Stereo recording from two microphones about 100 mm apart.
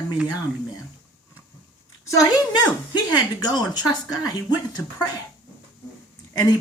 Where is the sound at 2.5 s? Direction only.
45° left (ahead or behind).